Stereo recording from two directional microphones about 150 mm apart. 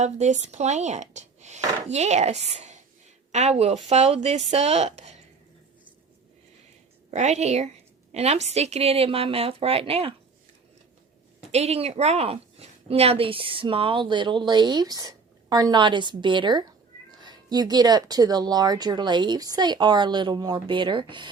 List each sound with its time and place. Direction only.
0.0 s speech: 50° right (ahead or behind)
7.1 s a woman's voice: 50° right (ahead or behind)
11.5 s a woman's voice: 45° right (ahead or behind)